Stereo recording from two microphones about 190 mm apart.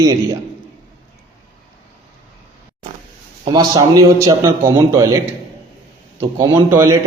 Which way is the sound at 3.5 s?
20° right (ahead or behind).